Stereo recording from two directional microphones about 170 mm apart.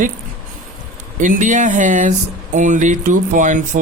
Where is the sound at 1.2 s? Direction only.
45° right (ahead or behind).